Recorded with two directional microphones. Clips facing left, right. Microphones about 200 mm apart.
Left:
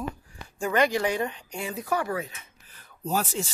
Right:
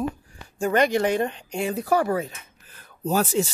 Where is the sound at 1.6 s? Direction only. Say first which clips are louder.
Right 7 dB; 65° right (ahead or behind).